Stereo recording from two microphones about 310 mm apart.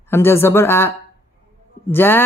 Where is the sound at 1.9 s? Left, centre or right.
Centre.